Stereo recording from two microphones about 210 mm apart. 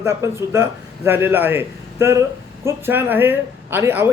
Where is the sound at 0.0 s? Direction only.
15° right (ahead or behind).